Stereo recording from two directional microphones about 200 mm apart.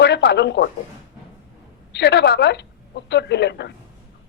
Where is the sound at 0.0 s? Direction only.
60° left (ahead or behind).